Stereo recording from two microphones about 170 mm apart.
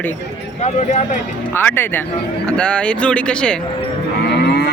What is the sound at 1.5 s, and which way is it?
Speech, 15° left (ahead or behind).